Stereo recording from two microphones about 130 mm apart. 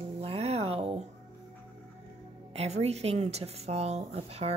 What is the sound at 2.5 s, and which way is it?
Speech, 55° right (ahead or behind).